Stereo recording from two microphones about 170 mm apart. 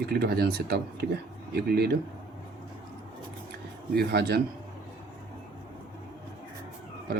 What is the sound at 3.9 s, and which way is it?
Speech, 70° right (ahead or behind).